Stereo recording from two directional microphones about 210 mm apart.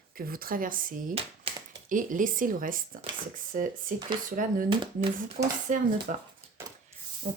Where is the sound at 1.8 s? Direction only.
40° right (ahead or behind).